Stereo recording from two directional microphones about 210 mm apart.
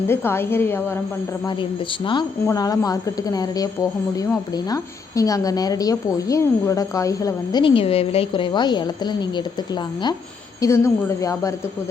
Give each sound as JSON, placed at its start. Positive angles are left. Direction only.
{"t": 0.1, "sound": "a woman's voice", "side_deg": 10}
{"t": 2.0, "sound": "a woman's voice", "side_deg": 20}
{"t": 10.6, "sound": "a woman's voice", "side_deg": 15}